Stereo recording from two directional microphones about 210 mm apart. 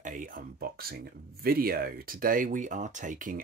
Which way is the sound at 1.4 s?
45° right (ahead or behind).